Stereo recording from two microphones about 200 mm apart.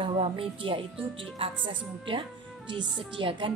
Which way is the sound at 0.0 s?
25° right (ahead or behind).